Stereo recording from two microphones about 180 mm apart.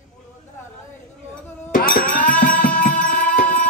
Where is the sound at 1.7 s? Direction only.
50° left (ahead or behind).